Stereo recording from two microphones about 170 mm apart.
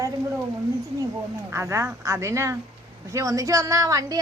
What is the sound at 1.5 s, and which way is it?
A woman's voice, 15° right (ahead or behind).